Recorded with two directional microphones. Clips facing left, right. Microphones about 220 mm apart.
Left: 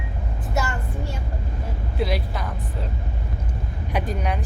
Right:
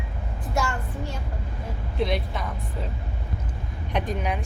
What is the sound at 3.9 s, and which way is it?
Speech, centre (ahead or behind).